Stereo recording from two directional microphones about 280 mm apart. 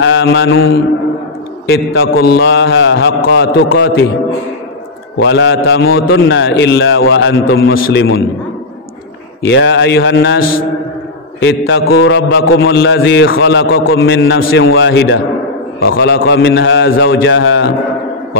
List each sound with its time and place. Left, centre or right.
0.0 s mantra: left
1.7 s a man's voice: left
5.2 s a man's voice: left
9.5 s a man's voice: left